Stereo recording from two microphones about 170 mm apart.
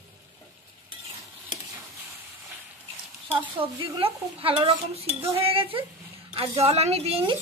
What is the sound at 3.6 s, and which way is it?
Dishes, 30° right (ahead or behind).